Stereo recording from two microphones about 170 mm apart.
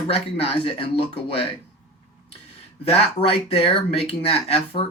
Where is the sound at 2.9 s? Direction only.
35° left (ahead or behind).